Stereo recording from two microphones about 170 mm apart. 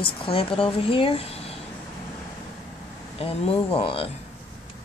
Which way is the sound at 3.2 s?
35° left (ahead or behind).